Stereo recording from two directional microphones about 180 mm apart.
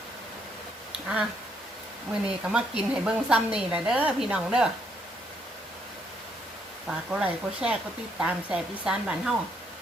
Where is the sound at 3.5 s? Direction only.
5° right (ahead or behind).